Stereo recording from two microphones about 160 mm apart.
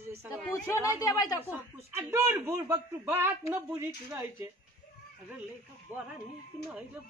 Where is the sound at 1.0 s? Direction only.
25° left (ahead or behind).